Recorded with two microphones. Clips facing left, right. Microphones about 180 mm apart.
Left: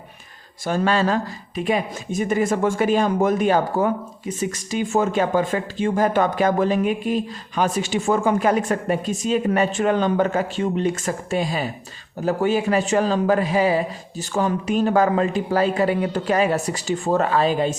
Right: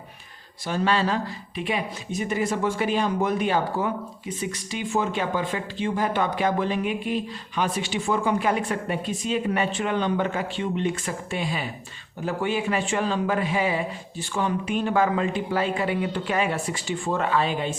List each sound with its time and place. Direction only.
0.6 s a man's voice: 45° left (ahead or behind)